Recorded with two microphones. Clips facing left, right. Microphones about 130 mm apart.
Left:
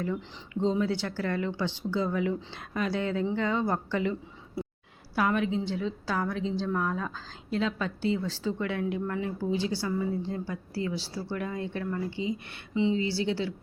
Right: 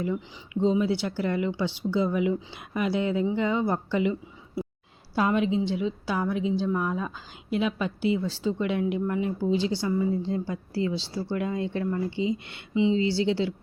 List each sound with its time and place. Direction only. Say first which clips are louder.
0.0 s a woman's voice: right 3 dB; 10° right (ahead or behind)